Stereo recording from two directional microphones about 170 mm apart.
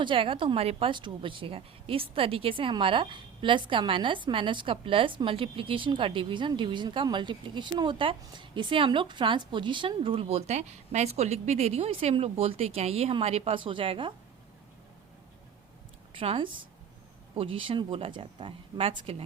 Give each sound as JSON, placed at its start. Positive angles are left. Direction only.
{"t": 0.0, "sound": "a woman's voice", "side_deg": -30}
{"t": 16.1, "sound": "a woman's voice", "side_deg": -30}